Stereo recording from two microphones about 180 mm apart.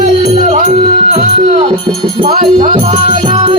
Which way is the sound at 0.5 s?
40° right (ahead or behind).